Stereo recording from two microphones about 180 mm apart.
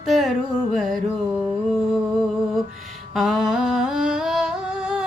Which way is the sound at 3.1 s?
Centre (ahead or behind).